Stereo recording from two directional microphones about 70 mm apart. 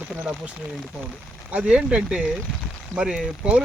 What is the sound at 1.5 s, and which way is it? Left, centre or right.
Speech, centre.